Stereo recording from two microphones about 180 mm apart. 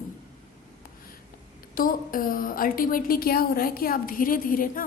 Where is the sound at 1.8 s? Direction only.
50° left (ahead or behind).